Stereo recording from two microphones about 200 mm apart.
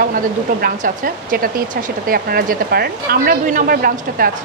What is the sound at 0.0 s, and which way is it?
Speech, 50° right (ahead or behind).